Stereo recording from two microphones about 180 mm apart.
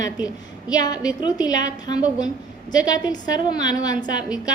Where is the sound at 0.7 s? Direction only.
20° left (ahead or behind).